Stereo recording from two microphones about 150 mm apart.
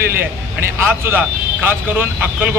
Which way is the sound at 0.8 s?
15° right (ahead or behind).